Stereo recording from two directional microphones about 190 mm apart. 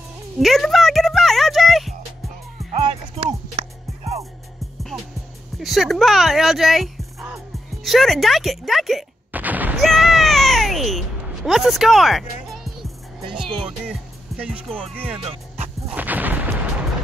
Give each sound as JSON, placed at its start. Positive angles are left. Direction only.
{"t": 0.4, "sound": "a sound", "side_deg": 0}
{"t": 2.7, "sound": "music", "side_deg": -35}
{"t": 5.6, "sound": "speech", "side_deg": 0}
{"t": 7.8, "sound": "gunshot", "side_deg": 0}
{"t": 9.8, "sound": "a sound", "side_deg": 0}
{"t": 13.3, "sound": "music", "side_deg": 0}
{"t": 14.3, "sound": "speech", "side_deg": -5}
{"t": 15.9, "sound": "artillery fire", "side_deg": -10}